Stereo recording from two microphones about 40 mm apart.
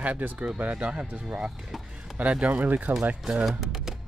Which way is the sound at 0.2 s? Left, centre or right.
Right.